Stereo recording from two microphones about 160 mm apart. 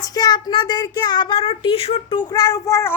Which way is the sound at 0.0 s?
25° left (ahead or behind).